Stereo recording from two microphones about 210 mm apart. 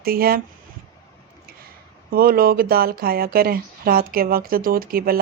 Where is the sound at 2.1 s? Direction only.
45° right (ahead or behind).